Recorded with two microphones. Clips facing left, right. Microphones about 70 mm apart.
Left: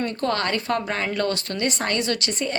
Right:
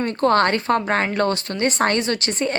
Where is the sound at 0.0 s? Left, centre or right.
Right.